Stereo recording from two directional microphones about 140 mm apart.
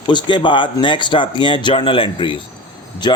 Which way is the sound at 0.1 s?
30° left (ahead or behind).